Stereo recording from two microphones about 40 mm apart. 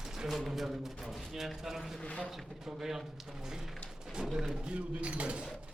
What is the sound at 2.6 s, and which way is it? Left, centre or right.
Speech, centre.